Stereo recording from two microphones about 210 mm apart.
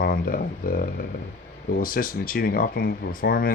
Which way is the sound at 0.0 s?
45° left (ahead or behind).